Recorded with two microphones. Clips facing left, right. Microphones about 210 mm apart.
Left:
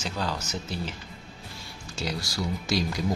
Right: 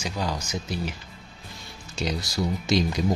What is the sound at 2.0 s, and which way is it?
Speech, 20° right (ahead or behind).